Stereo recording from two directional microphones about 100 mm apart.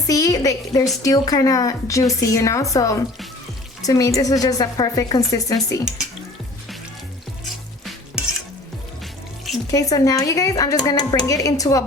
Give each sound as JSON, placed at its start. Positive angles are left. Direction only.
{"t": 0.1, "sound": "a woman's voice", "side_deg": 35}
{"t": 9.7, "sound": "a woman's voice", "side_deg": 35}